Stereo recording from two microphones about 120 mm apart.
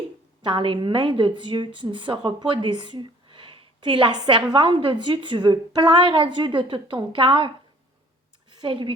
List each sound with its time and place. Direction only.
0.4 s a woman's voice: 45° right (ahead or behind)